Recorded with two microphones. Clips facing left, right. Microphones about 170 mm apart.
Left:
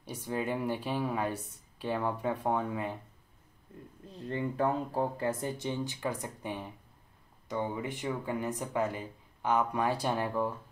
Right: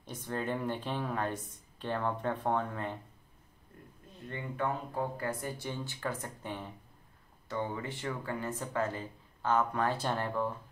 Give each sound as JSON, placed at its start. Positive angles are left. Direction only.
{"t": 0.0, "sound": "speech", "side_deg": 10}
{"t": 4.1, "sound": "speech", "side_deg": 35}